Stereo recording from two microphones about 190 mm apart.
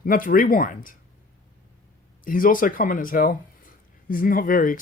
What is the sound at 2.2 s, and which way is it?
Speech, 45° left (ahead or behind).